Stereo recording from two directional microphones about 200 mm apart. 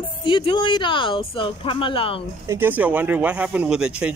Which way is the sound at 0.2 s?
25° left (ahead or behind).